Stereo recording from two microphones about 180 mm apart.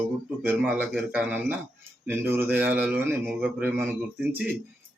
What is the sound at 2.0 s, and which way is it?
A man's voice, 10° right (ahead or behind).